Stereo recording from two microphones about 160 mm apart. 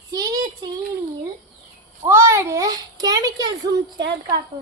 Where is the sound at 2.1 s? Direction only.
15° right (ahead or behind).